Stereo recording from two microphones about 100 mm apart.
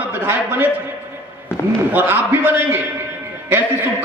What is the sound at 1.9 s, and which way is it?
A man's voice, 20° right (ahead or behind).